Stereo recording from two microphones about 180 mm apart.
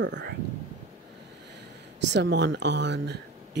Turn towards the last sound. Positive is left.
turn(degrees=-70)  # may be behind; listen again after turning